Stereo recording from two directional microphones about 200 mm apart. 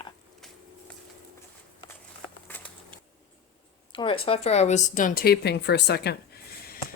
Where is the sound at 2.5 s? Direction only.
10° left (ahead or behind).